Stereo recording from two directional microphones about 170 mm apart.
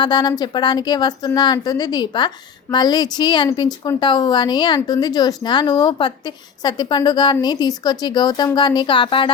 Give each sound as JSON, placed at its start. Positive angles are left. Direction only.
{"t": 0.0, "sound": "speech", "side_deg": 25}